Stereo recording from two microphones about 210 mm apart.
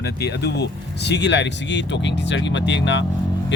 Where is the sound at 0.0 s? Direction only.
50° left (ahead or behind).